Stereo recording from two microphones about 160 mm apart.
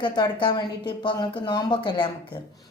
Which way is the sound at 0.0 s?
30° left (ahead or behind).